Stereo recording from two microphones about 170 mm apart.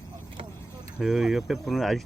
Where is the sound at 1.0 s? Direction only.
Centre (ahead or behind).